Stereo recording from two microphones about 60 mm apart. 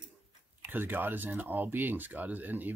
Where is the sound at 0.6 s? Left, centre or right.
Right.